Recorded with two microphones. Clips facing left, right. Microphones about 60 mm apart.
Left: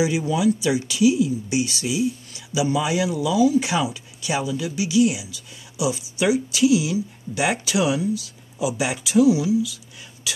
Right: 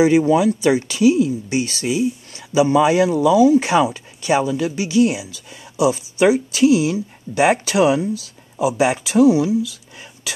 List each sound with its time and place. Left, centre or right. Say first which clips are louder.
0.0 s speech: right 7 dB; right